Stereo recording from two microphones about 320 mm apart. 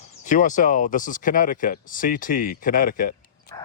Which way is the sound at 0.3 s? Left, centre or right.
Left.